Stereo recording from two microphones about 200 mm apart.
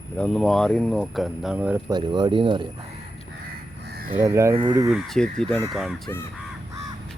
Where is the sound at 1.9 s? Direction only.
20° right (ahead or behind).